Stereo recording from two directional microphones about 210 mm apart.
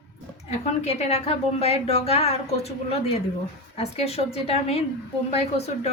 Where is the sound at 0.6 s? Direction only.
30° left (ahead or behind).